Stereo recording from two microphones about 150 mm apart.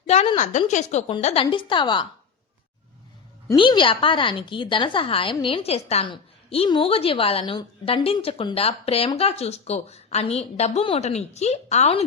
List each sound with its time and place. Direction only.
0.3 s a woman's voice: 50° left (ahead or behind); by 2.0 s 30° left (ahead or behind)
3.5 s a woman's voice: 30° left (ahead or behind)